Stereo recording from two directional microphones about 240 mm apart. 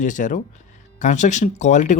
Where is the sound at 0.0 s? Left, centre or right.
Left.